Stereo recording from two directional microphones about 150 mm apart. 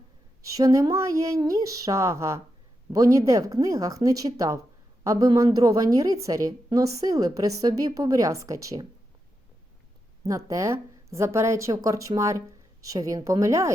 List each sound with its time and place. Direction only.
0.5 s a woman's voice: 20° right (ahead or behind)
10.2 s a woman's voice: 20° right (ahead or behind)